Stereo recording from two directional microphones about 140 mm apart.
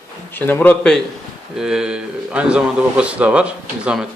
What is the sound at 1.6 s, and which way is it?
A man's voice, 5° right (ahead or behind).